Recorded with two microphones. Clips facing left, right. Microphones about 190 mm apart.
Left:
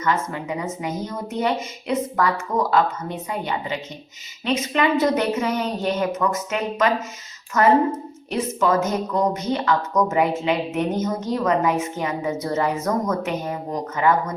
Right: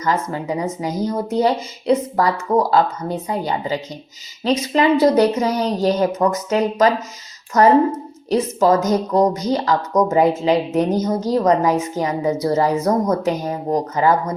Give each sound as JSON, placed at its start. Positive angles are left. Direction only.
{"t": 0.0, "sound": "a woman's voice", "side_deg": -35}